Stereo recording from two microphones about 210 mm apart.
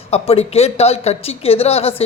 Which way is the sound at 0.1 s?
30° left (ahead or behind).